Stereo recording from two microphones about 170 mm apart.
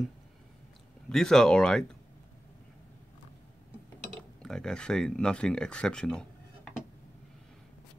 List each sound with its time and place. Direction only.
1.0 s speech: 5° left (ahead or behind)
4.4 s speech: 5° left (ahead or behind)